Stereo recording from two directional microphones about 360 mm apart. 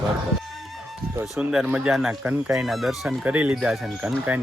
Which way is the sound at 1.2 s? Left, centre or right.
Centre.